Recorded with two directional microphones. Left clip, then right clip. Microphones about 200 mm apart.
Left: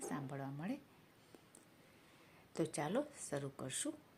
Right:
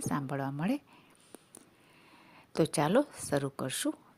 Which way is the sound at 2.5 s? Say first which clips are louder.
Right 12 dB; 45° right (ahead or behind).